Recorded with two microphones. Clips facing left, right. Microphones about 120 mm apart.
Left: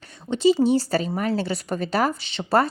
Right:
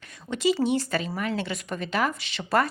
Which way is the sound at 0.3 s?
30° left (ahead or behind).